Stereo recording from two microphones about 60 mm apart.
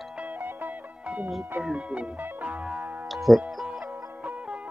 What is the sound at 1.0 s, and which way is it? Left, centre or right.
Music, right.